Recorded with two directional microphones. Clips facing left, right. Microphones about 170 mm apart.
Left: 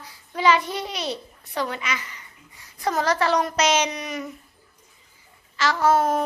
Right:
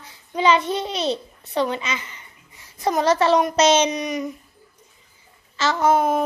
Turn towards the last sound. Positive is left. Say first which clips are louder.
# right 1 dB
turn(degrees=-10)  # may be behind; listen again after turning